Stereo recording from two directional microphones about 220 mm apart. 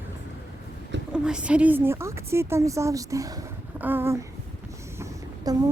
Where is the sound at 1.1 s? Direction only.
5° right (ahead or behind).